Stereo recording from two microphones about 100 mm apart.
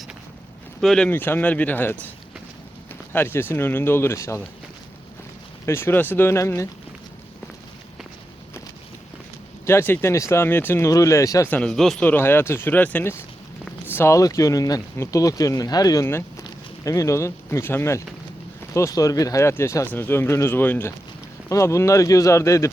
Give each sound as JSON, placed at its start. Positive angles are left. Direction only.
{"t": 0.8, "sound": "speech", "side_deg": 5}
{"t": 1.1, "sound": "speech", "side_deg": 20}
{"t": 5.6, "sound": "speech", "side_deg": 25}
{"t": 9.6, "sound": "speech", "side_deg": 25}
{"t": 10.8, "sound": "speech", "side_deg": 30}
{"t": 11.4, "sound": "speech", "side_deg": 10}
{"t": 12.0, "sound": "speech", "side_deg": 20}